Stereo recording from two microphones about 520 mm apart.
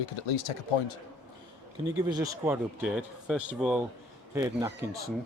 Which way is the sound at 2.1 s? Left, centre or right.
Centre.